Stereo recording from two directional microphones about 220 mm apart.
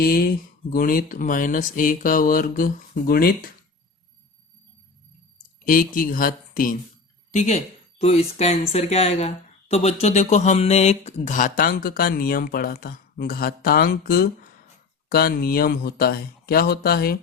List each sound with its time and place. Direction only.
0.0 s speech: 45° left (ahead or behind)
5.6 s speech: 40° left (ahead or behind)